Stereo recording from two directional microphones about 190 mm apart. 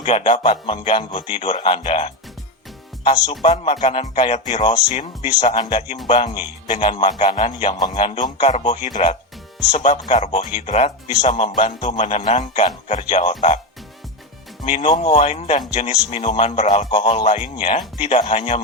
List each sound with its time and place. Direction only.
0.0 s speech: 35° left (ahead or behind)
14.6 s speech: 35° left (ahead or behind)